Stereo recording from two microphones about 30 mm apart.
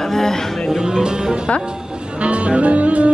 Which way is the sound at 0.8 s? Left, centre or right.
Right.